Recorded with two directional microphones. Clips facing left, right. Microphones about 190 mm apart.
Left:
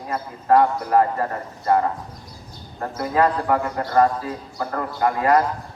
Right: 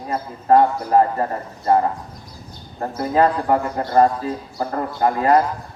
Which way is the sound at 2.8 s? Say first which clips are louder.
Right 3 dB; 30° right (ahead or behind).